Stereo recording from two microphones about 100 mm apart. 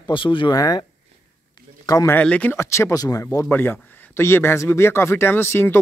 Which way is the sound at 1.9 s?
35° left (ahead or behind).